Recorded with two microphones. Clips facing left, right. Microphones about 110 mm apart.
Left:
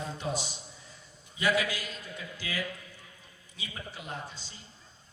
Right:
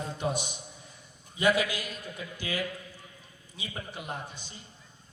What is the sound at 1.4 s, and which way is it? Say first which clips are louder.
Speech: right 3 dB; 20° right (ahead or behind).